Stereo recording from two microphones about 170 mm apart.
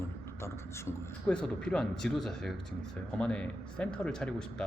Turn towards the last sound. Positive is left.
turn(degrees=5)  # may be behind; listen again after turning